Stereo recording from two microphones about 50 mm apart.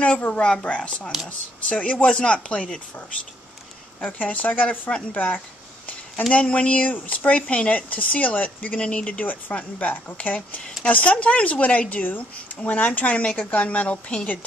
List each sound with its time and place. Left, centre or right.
0.3 s speech: left
4.0 s speech: left